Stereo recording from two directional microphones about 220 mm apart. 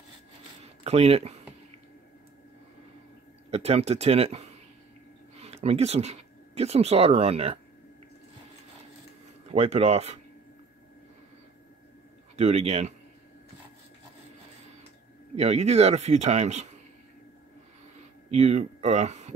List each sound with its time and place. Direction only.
0.8 s speech: 30° right (ahead or behind)
3.4 s speech: 30° right (ahead or behind)
9.5 s speech: 30° right (ahead or behind)
12.4 s speech: 30° right (ahead or behind)
15.3 s speech: 30° right (ahead or behind)
18.3 s speech: 30° right (ahead or behind)